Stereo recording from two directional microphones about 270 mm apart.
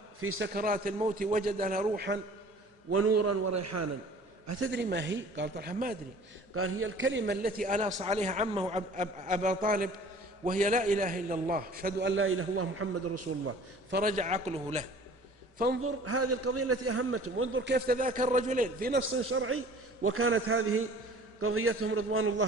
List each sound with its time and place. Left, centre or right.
0.2 s a man's voice: right
0.5 s a man's voice: right
2.9 s a man's voice: right
4.6 s a man's voice: right
6.5 s a man's voice: right
13.9 s a man's voice: right
15.8 s a man's voice: right
19.1 s a man's voice: right